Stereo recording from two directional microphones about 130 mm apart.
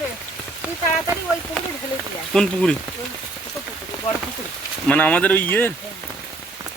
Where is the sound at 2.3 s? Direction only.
5° left (ahead or behind).